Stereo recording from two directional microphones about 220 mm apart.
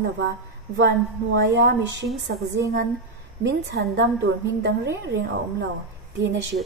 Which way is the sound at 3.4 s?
50° right (ahead or behind).